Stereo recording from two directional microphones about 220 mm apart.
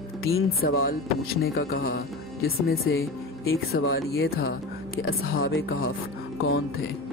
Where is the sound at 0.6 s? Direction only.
40° left (ahead or behind).